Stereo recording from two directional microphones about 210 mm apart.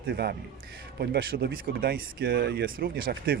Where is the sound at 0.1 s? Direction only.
50° right (ahead or behind).